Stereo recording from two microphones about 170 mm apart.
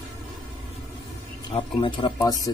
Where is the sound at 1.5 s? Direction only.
30° left (ahead or behind).